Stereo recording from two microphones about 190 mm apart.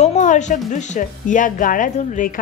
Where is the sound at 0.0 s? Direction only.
40° left (ahead or behind).